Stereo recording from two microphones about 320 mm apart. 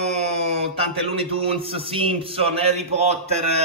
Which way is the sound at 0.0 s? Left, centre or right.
Right.